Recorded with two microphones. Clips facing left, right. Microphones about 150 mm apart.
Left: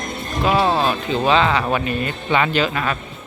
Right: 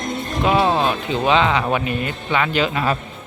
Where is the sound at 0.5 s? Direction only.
15° right (ahead or behind).